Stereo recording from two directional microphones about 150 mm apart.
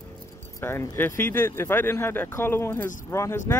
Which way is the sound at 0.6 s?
15° left (ahead or behind).